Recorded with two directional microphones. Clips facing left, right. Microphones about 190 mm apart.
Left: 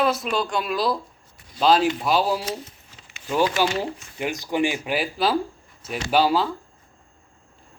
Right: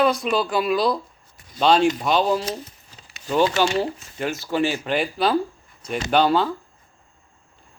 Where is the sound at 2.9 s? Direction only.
35° right (ahead or behind).